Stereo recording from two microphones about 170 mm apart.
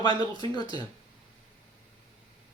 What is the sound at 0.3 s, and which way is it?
Speech, 25° left (ahead or behind).